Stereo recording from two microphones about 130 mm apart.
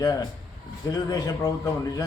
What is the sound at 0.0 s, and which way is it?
A man's voice, 30° left (ahead or behind).